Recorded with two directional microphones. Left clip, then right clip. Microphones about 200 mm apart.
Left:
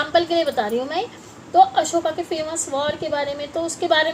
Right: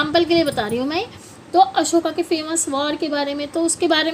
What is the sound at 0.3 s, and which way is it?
A woman's voice, 60° right (ahead or behind).